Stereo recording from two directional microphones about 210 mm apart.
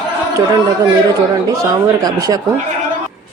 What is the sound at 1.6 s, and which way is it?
Speech, 15° right (ahead or behind).